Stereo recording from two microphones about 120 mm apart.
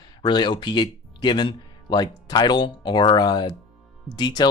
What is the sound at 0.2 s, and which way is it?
Speech, 40° left (ahead or behind).